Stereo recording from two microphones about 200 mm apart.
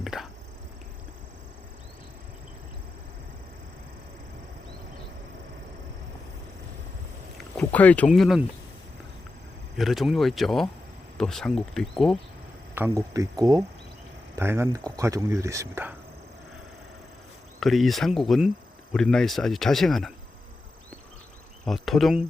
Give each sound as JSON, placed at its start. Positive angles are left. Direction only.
{"t": 0.0, "sound": "a sound", "side_deg": 0}
{"t": 7.3, "sound": "speech", "side_deg": 5}
{"t": 9.7, "sound": "speech", "side_deg": 0}
{"t": 12.7, "sound": "speech", "side_deg": -10}
{"t": 17.6, "sound": "speech", "side_deg": 0}
{"t": 21.6, "sound": "speech", "side_deg": 0}